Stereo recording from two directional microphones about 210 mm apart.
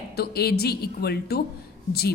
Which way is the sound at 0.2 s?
50° left (ahead or behind).